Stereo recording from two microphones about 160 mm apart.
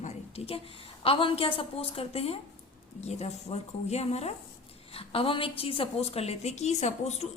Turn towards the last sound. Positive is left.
turn(degrees=45)  # may be behind; listen again after turning